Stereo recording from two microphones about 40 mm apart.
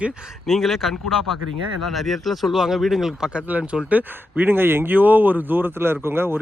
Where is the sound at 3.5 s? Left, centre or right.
Right.